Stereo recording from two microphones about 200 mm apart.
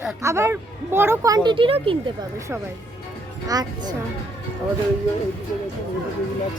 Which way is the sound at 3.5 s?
20° right (ahead or behind).